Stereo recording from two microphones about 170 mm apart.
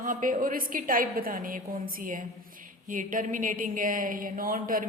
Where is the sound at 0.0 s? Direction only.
50° right (ahead or behind).